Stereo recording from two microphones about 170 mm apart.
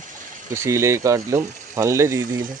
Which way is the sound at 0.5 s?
15° right (ahead or behind).